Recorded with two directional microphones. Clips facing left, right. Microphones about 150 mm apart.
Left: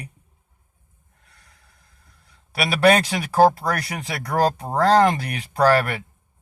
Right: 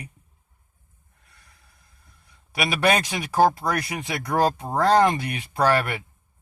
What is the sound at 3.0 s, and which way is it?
Speech, 35° left (ahead or behind).